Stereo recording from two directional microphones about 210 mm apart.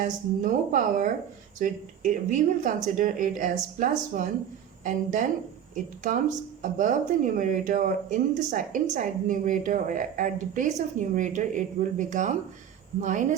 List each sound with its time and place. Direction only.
0.0 s speech: 40° right (ahead or behind)